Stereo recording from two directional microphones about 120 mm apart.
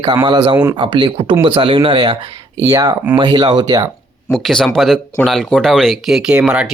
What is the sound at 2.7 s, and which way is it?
Speech, 25° right (ahead or behind).